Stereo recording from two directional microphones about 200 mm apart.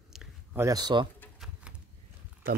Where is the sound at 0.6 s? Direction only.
20° right (ahead or behind).